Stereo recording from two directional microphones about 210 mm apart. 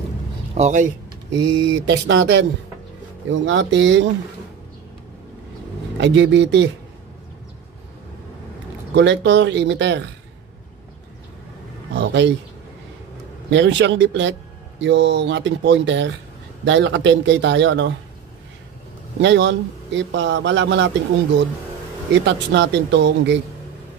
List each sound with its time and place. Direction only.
0.6 s speech: 35° right (ahead or behind)
1.7 s a man's voice: 60° right (ahead or behind)
5.9 s a man's voice: 60° right (ahead or behind)
8.9 s a man's voice: 55° right (ahead or behind)
11.9 s a man's voice: 55° right (ahead or behind)
13.5 s a man's voice: 55° right (ahead or behind)
19.2 s a man's voice: 55° right (ahead or behind)
22.1 s a man's voice: 60° right (ahead or behind)